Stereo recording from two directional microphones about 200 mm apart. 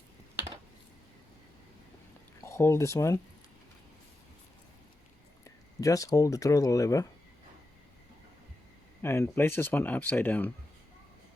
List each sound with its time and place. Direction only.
2.4 s speech: 15° left (ahead or behind)
5.8 s speech: 15° left (ahead or behind)
9.0 s speech: 10° left (ahead or behind)